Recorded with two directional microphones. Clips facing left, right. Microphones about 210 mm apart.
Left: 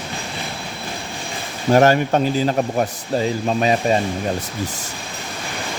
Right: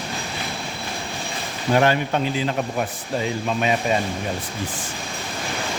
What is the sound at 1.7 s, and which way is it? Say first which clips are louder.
Speech: left 5 dB; 40° left (ahead or behind).